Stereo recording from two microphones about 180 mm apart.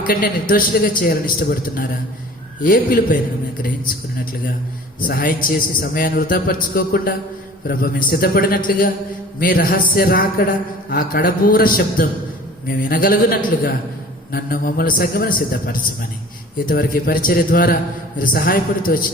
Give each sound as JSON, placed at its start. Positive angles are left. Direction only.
{"t": 0.1, "sound": "a man's voice", "side_deg": 50}
{"t": 4.9, "sound": "a man's voice", "side_deg": 50}